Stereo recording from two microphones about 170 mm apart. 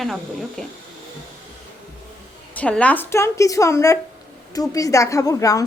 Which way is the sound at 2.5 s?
5° left (ahead or behind).